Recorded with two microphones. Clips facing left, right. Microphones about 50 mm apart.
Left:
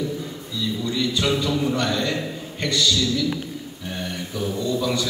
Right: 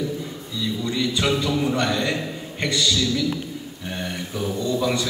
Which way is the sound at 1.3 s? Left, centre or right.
Centre.